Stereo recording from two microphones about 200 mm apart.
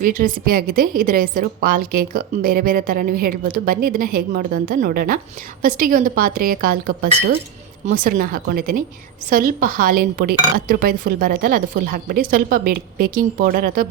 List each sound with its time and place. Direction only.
0.0 s a woman's voice: 40° right (ahead or behind)